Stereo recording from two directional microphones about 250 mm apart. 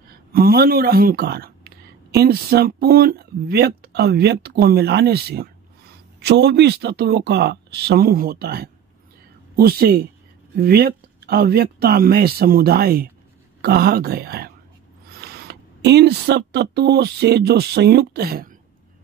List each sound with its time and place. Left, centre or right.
0.1 s a man's voice: right